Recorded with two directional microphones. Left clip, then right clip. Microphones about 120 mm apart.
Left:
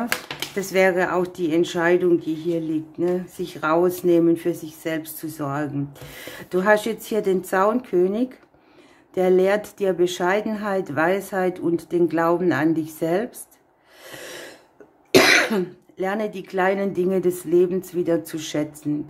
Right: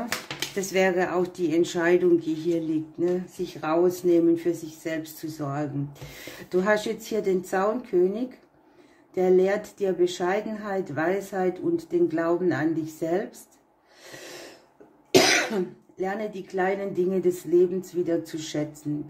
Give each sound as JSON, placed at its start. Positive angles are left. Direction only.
{"t": 0.6, "sound": "speech", "side_deg": 30}
{"t": 3.0, "sound": "speech", "side_deg": 30}
{"t": 14.0, "sound": "gasp", "side_deg": 40}
{"t": 15.0, "sound": "speech", "side_deg": 40}